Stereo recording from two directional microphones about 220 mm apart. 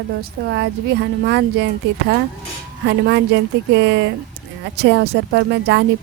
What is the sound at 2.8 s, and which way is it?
Speech, 50° right (ahead or behind).